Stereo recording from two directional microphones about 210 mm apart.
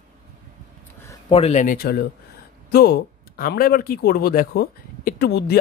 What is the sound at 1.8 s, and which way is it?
Speech, 50° left (ahead or behind).